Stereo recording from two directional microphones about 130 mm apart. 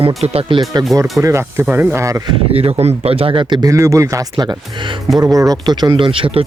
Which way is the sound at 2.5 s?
50° right (ahead or behind).